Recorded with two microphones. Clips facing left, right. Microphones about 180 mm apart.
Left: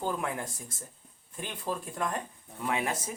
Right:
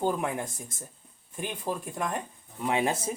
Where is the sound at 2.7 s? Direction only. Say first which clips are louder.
Right 7 dB; 30° right (ahead or behind).